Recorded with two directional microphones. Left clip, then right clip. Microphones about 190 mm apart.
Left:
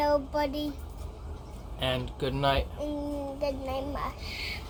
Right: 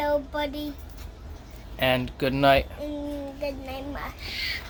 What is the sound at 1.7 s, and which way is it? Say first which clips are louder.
Speech: right 7 dB; 50° right (ahead or behind).